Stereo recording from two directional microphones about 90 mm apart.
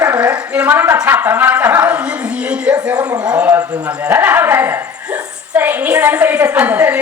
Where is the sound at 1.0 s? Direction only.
20° right (ahead or behind).